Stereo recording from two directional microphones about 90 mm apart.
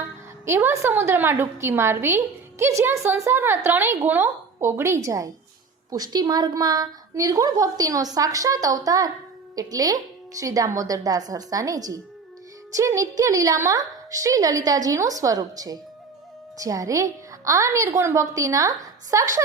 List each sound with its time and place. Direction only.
0.4 s a woman's voice: 30° right (ahead or behind)
5.9 s a woman's voice: 50° right (ahead or behind)